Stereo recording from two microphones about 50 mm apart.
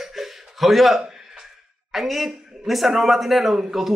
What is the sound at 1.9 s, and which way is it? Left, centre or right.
Speech, centre.